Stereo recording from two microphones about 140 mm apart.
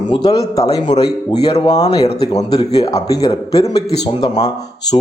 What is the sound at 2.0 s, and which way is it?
Speech, 45° left (ahead or behind).